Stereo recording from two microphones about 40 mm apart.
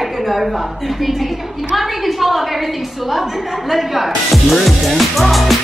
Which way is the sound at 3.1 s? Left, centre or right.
Centre.